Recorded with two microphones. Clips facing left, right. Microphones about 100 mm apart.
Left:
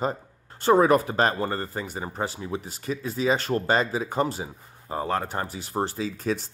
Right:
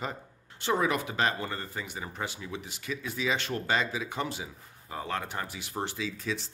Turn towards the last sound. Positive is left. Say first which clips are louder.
# left 6 dB
turn(degrees=45)  # may be behind; listen again after turning